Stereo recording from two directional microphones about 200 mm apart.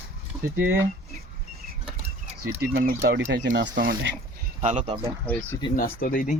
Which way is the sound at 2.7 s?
50° right (ahead or behind).